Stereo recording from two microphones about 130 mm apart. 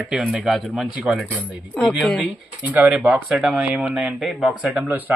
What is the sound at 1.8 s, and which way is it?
Speech, 10° left (ahead or behind).